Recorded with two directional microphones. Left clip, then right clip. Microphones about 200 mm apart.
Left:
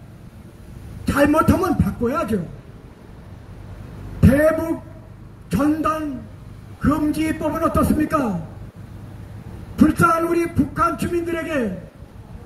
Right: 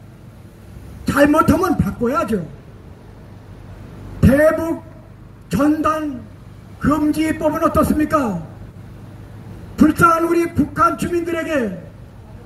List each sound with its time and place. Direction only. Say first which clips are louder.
1.0 s a man's voice: right 3 dB; 35° right (ahead or behind)
4.2 s a woman's voice: right 3 dB; 35° right (ahead or behind)
9.8 s a man's voice: right 3 dB; 35° right (ahead or behind)